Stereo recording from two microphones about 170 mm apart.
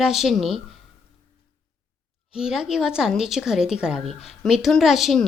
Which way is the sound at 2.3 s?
5° right (ahead or behind).